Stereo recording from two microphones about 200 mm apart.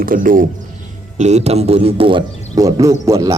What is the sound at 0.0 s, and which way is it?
Speech, 45° right (ahead or behind).